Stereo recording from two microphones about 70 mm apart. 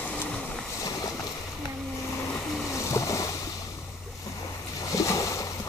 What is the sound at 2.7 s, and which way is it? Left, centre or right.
Boat, left.